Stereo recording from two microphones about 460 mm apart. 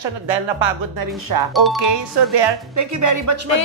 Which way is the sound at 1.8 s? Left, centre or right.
Right.